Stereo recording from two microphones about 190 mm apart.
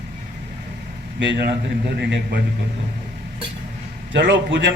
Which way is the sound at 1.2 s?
65° right (ahead or behind).